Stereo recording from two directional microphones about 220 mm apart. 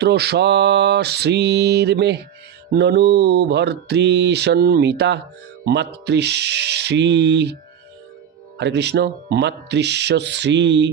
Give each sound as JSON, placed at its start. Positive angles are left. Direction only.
{"t": 0.0, "sound": "mantra", "side_deg": -50}
{"t": 8.5, "sound": "mantra", "side_deg": -50}